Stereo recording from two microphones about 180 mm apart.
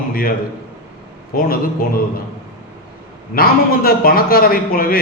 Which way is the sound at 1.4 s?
55° left (ahead or behind).